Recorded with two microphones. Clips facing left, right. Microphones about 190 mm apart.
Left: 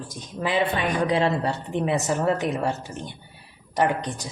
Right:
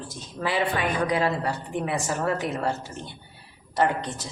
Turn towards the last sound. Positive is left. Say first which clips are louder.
# left 1 dB
turn(degrees=15)  # may be behind; listen again after turning